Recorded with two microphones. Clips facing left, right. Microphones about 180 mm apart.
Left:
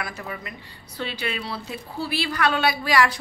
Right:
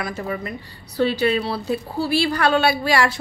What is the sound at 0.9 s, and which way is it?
A woman's voice, 35° right (ahead or behind).